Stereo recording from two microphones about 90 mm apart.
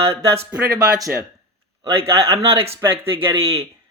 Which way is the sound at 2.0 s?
35° right (ahead or behind).